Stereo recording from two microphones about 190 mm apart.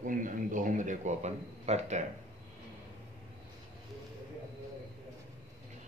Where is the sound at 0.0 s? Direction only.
45° right (ahead or behind).